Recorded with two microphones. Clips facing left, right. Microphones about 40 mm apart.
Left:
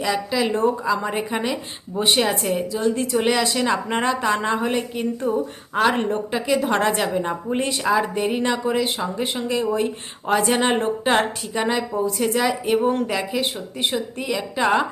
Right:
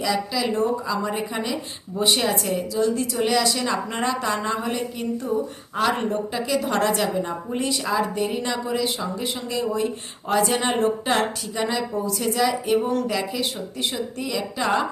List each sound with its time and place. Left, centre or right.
0.0 s a woman's voice: left